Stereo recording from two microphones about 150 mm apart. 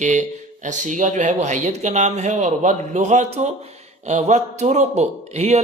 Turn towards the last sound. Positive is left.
turn(degrees=-45)  # may be behind; listen again after turning